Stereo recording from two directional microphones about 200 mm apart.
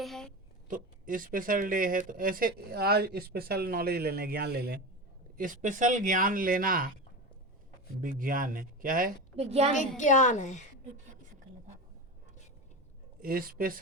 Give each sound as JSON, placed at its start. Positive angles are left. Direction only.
{"t": 0.0, "sound": "a sound", "side_deg": 0}
{"t": 0.7, "sound": "speech", "side_deg": -45}
{"t": 5.4, "sound": "speech", "side_deg": -40}
{"t": 8.2, "sound": "speech", "side_deg": -45}
{"t": 9.4, "sound": "a child's voice", "side_deg": -30}
{"t": 10.0, "sound": "a child's voice", "side_deg": 40}
{"t": 13.2, "sound": "speech", "side_deg": -45}